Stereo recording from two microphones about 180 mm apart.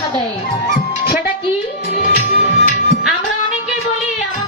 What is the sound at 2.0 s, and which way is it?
Music, 45° left (ahead or behind).